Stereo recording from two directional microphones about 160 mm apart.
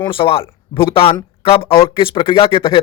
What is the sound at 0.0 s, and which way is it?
Speech, 35° left (ahead or behind).